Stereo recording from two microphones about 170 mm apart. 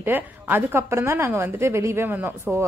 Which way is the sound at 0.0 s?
10° right (ahead or behind).